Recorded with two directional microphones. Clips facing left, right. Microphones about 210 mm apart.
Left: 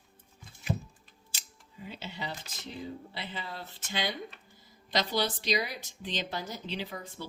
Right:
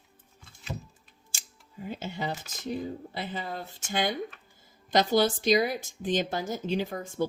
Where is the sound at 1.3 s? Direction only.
50° right (ahead or behind).